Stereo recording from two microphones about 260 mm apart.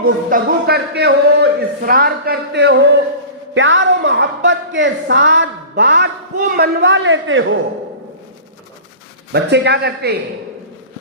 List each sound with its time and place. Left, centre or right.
0.0 s speech: right
9.3 s speech: right